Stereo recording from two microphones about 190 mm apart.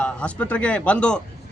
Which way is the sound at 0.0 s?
5° left (ahead or behind).